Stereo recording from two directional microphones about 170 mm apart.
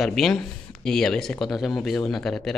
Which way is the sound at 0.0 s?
Centre (ahead or behind).